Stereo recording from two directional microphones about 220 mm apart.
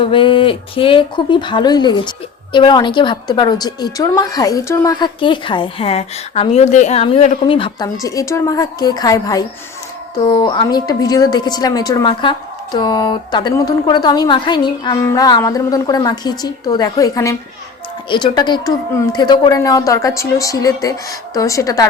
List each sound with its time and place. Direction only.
0.0 s a woman's voice: 25° left (ahead or behind)